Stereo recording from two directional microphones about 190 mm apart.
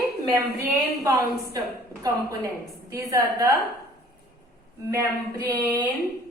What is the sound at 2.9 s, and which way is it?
Speech, 15° right (ahead or behind).